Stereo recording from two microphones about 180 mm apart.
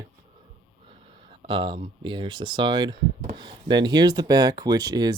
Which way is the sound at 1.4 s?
30° right (ahead or behind).